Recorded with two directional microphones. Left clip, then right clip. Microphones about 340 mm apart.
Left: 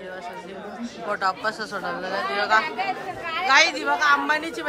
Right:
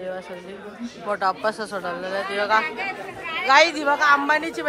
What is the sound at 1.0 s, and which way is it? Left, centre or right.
A woman's voice, centre.